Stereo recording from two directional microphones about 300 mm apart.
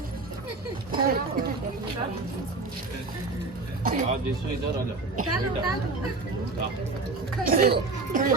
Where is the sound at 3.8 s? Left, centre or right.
Right.